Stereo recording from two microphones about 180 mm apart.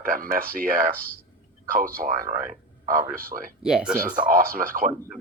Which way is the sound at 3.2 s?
50° right (ahead or behind).